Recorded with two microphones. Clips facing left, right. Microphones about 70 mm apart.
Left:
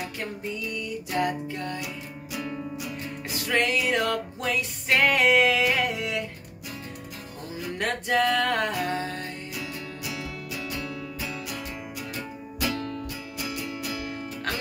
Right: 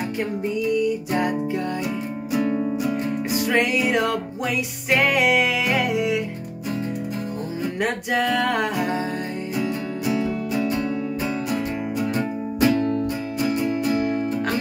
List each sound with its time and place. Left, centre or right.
1.1 s music: centre
2.4 s music: right
3.3 s music: centre
7.8 s music: centre
9.6 s music: right